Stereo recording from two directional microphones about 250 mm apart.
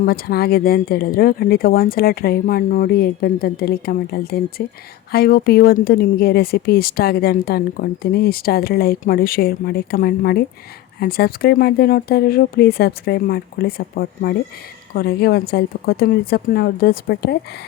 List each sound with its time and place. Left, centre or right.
0.0 s speech: left